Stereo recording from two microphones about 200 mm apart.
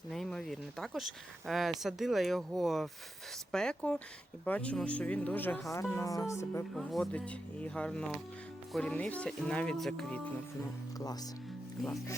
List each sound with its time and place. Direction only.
0.1 s speech: centre (ahead or behind)
6.7 s speech: centre (ahead or behind)
11.0 s speech: 20° left (ahead or behind)